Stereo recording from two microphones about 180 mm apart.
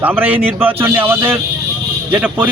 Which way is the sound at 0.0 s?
10° right (ahead or behind).